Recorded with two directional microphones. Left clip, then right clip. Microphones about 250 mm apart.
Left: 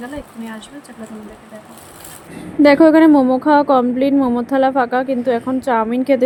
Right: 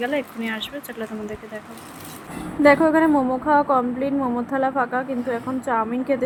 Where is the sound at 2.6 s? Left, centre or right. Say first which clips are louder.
Left 6 dB; left.